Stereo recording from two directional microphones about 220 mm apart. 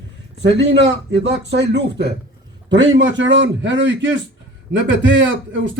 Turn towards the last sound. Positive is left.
turn(degrees=-55)  # may be behind; listen again after turning